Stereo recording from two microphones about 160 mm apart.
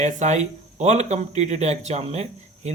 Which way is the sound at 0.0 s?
50° right (ahead or behind).